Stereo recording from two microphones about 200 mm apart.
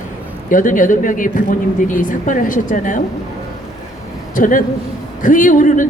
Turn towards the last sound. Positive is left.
turn(degrees=40)  # may be behind; listen again after turning